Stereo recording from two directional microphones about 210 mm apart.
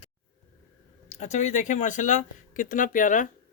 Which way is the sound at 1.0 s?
35° left (ahead or behind).